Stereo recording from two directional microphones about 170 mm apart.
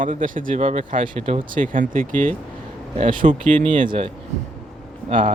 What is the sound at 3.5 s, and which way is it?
Speech, 30° right (ahead or behind).